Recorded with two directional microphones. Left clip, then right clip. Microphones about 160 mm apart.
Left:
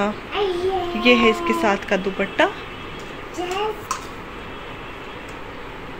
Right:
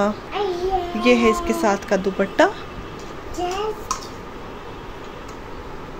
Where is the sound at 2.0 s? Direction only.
30° right (ahead or behind).